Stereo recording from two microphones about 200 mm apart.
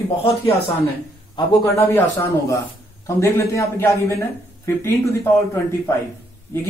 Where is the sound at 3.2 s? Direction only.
10° left (ahead or behind).